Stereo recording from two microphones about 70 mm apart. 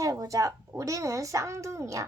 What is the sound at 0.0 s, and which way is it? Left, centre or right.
A child's voice, right.